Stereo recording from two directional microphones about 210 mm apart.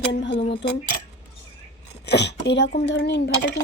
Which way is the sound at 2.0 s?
55° left (ahead or behind).